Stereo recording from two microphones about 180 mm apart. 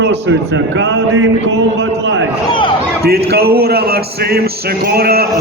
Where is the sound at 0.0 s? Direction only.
85° right.